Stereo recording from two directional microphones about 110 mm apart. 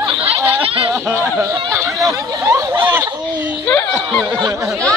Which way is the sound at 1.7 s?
25° right (ahead or behind).